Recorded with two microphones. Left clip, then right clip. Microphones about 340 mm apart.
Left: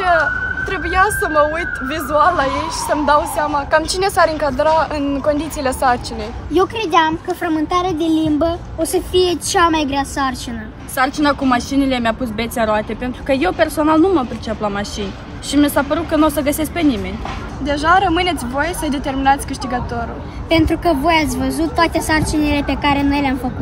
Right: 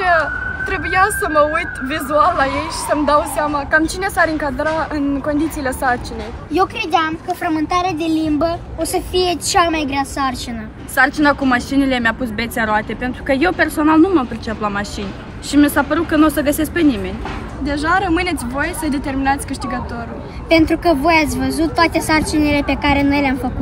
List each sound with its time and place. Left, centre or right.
0.0 s speech: centre
3.7 s a woman's voice: left
6.5 s a woman's voice: centre